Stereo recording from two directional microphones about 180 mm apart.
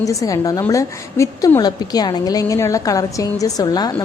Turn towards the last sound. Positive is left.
turn(degrees=20)  # may be behind; listen again after turning